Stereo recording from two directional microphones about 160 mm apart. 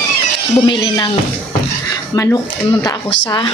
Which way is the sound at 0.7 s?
25° left (ahead or behind).